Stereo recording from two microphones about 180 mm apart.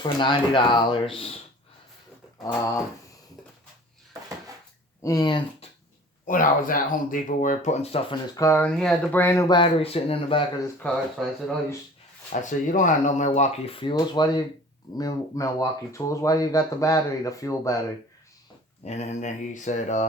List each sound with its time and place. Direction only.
0.0 s speech: 25° left (ahead or behind)
2.4 s speech: 20° left (ahead or behind)
5.0 s speech: 20° left (ahead or behind)
6.2 s speech: 50° left (ahead or behind); by 9.5 s 10° left (ahead or behind)
9.5 s speech: 30° left (ahead or behind)
10.8 s speech: 10° left (ahead or behind)
12.3 s speech: 45° left (ahead or behind); by 17.9 s 15° left (ahead or behind)
18.9 s speech: 40° left (ahead or behind)